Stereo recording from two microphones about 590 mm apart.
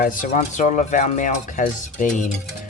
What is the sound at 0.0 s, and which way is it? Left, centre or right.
Speech, centre.